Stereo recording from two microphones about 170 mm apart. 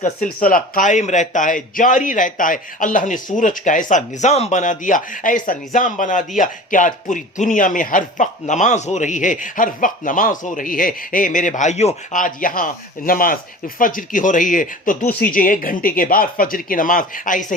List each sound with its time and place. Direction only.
0.4 s a man's voice: 55° left (ahead or behind)